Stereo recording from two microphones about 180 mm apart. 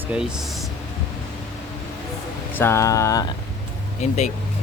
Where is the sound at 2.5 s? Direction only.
15° left (ahead or behind).